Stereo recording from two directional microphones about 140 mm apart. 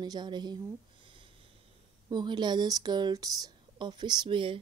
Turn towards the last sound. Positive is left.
turn(degrees=-35)  # may be behind; listen again after turning